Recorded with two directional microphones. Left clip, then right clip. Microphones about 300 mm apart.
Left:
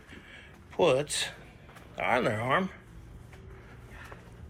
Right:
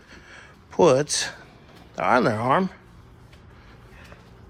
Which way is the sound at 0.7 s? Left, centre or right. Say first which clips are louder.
Right 7 dB; right.